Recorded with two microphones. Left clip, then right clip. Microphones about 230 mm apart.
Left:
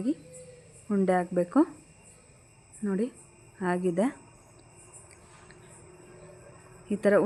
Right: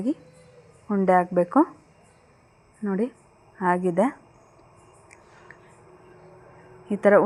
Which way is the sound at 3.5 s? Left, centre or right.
Centre.